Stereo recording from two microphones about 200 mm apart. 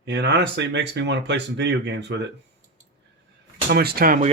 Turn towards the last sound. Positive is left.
turn(degrees=-45)  # may be behind; listen again after turning